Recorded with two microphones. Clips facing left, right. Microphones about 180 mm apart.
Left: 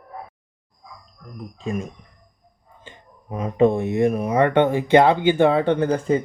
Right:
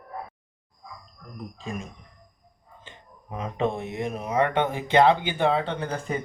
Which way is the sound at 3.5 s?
55° left (ahead or behind).